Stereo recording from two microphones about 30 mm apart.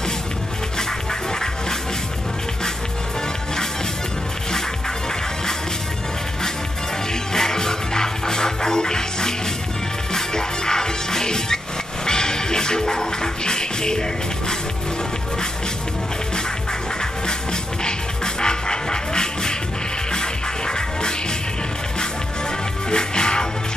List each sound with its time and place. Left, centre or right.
7.3 s music: centre
17.8 s music: left
22.8 s music: left